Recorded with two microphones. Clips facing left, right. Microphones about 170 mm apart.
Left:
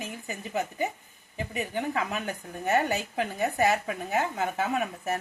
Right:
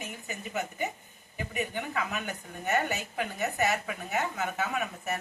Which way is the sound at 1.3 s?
30° left (ahead or behind).